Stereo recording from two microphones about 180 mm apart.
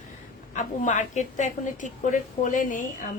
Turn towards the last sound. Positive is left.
turn(degrees=45)  # may be behind; listen again after turning